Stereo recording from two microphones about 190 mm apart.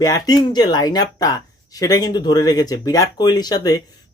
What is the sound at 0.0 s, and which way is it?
Speech, 20° left (ahead or behind).